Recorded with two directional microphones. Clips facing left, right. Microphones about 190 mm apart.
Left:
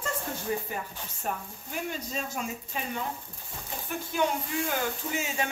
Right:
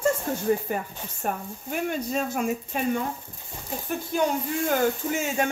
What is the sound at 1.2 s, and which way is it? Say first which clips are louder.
Speech: right 5 dB; 55° right (ahead or behind).